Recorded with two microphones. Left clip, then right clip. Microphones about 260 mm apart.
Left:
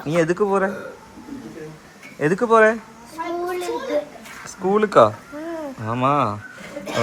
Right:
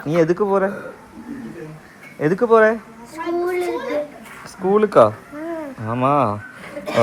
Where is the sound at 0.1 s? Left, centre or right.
Centre.